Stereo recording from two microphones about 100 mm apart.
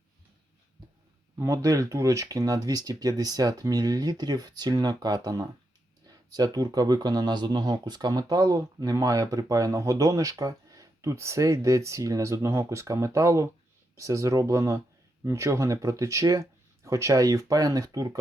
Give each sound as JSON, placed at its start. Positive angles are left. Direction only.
{"t": 1.4, "sound": "speech", "side_deg": -35}